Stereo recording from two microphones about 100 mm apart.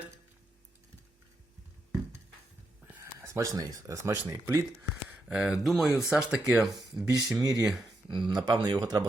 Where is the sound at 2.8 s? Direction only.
30° right (ahead or behind).